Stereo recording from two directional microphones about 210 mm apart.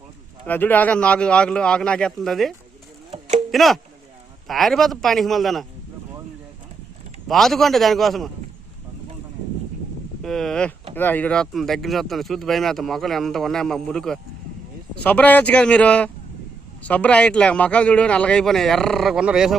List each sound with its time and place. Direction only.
0.4 s speech: 10° left (ahead or behind)
3.1 s a sound: 30° right (ahead or behind)
3.5 s speech: centre (ahead or behind)
7.3 s speech: centre (ahead or behind)
10.2 s speech: centre (ahead or behind)